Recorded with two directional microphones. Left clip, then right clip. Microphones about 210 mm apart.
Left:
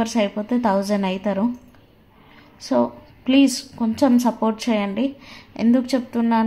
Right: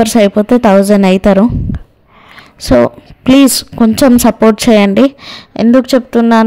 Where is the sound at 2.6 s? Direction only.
50° right (ahead or behind).